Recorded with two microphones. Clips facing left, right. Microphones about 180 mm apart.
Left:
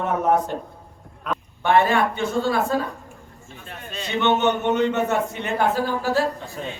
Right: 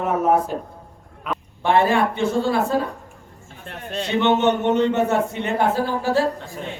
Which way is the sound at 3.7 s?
70° right (ahead or behind).